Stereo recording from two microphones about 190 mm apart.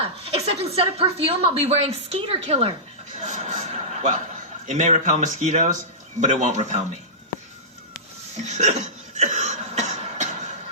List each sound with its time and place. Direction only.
0.0 s a woman's voice: 30° right (ahead or behind)
3.2 s a sound: 40° right (ahead or behind)
4.6 s a woman's voice: 40° right (ahead or behind)
8.4 s cough: 35° right (ahead or behind)